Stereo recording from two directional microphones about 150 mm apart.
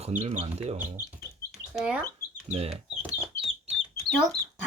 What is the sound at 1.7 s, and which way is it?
Speech, 5° right (ahead or behind).